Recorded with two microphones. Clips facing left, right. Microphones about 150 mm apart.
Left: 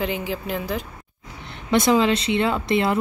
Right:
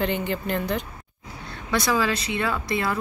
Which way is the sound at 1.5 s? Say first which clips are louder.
Left 6 dB; 20° left (ahead or behind).